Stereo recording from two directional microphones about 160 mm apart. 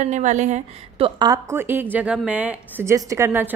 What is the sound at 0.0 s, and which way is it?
A woman's voice, 50° right (ahead or behind).